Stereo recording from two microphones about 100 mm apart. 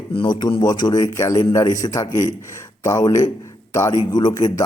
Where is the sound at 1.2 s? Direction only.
30° left (ahead or behind).